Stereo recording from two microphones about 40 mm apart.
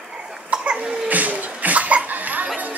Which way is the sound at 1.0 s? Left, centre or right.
Right.